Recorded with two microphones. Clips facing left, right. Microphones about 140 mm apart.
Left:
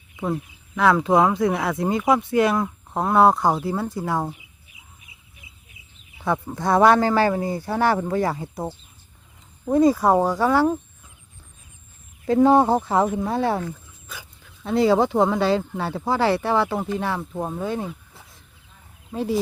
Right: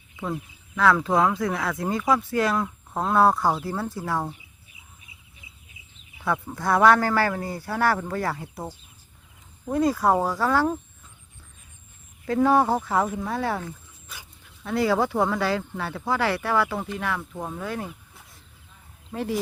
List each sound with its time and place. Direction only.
0.8 s speech: 20° left (ahead or behind)
6.1 s speech: 20° left (ahead or behind)
9.9 s speech: 10° left (ahead or behind)
12.2 s speech: 25° left (ahead or behind)
14.6 s speech: 25° left (ahead or behind)